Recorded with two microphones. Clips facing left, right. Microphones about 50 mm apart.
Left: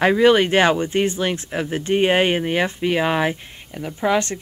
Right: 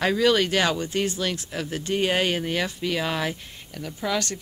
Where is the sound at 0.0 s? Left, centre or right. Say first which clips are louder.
Left 6 dB; left.